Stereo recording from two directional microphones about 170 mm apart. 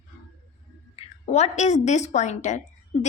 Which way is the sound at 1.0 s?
40° left (ahead or behind).